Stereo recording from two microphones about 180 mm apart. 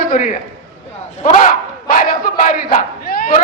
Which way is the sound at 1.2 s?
45° left (ahead or behind).